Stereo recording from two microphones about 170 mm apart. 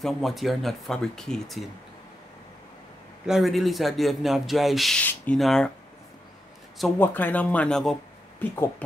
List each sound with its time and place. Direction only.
0.0 s speech: centre (ahead or behind)
3.3 s speech: centre (ahead or behind)
7.0 s speech: 10° left (ahead or behind)